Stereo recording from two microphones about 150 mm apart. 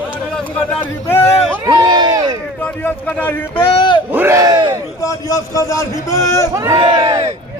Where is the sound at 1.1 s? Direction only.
15° left (ahead or behind).